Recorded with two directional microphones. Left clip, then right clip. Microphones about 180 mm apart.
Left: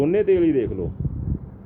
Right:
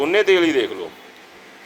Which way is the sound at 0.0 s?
20° left (ahead or behind).